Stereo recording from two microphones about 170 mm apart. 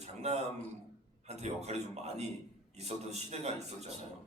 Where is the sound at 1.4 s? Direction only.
40° right (ahead or behind).